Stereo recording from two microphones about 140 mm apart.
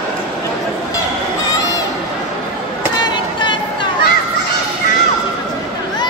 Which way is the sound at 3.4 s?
35° left (ahead or behind).